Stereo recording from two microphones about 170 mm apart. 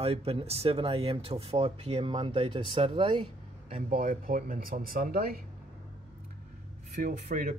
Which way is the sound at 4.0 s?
55° right (ahead or behind).